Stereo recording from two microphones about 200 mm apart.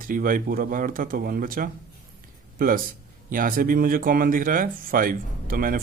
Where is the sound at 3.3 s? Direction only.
45° right (ahead or behind).